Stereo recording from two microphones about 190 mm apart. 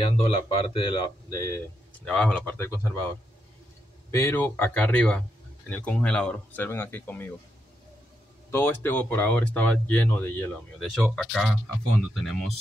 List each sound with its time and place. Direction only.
0.0 s speech: 30° left (ahead or behind)
2.0 s speech: 5° left (ahead or behind)
4.1 s speech: 15° left (ahead or behind)
8.5 s speech: 10° left (ahead or behind)
11.0 s speech: centre (ahead or behind)